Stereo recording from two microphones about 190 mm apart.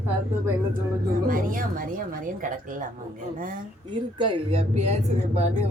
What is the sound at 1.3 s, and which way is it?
A woman's voice, 45° right (ahead or behind).